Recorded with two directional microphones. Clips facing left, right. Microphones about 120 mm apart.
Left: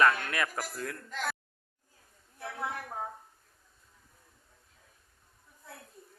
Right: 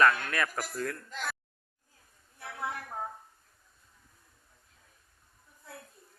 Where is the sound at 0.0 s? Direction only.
20° left (ahead or behind).